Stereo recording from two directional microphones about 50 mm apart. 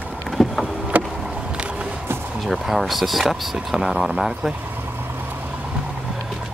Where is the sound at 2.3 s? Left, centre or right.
Centre.